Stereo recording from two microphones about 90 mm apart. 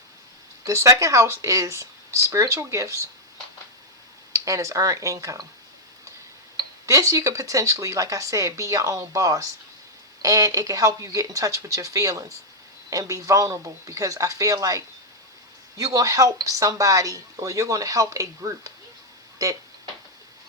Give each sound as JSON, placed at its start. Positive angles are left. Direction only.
{"t": 0.6, "sound": "speech", "side_deg": -35}
{"t": 4.3, "sound": "speech", "side_deg": -35}
{"t": 6.8, "sound": "speech", "side_deg": -40}
{"t": 15.8, "sound": "speech", "side_deg": -40}